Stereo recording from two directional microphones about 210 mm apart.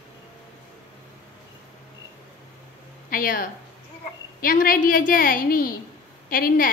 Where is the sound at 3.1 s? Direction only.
40° left (ahead or behind).